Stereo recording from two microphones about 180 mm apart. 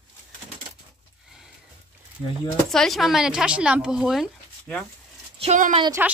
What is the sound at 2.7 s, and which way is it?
A woman's voice, centre (ahead or behind).